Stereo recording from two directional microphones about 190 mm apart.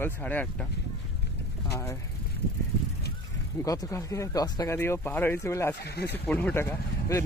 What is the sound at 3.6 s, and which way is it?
Speech, 20° left (ahead or behind).